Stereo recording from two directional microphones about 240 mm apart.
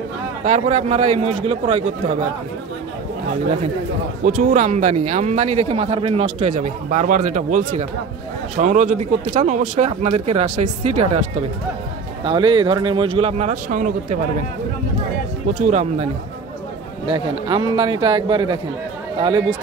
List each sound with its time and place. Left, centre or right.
0.5 s speech: right
4.2 s speech: right
15.6 s speech: right
17.1 s speech: centre